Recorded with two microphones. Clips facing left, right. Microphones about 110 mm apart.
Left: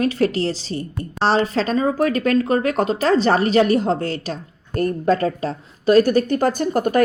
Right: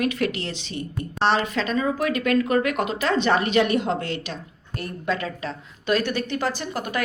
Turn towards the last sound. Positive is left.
turn(degrees=45)  # may be behind; listen again after turning